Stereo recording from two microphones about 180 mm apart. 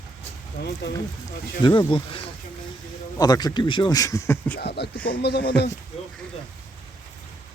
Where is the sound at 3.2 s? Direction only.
20° left (ahead or behind).